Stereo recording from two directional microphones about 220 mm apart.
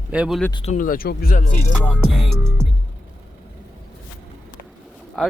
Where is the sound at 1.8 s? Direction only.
5° right (ahead or behind).